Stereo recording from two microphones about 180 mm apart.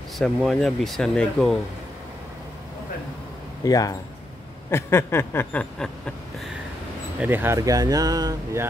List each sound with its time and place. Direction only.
0.2 s speech: centre (ahead or behind)
3.6 s speech: 20° left (ahead or behind)
4.6 s a sound: 15° left (ahead or behind)
7.2 s speech: 10° right (ahead or behind)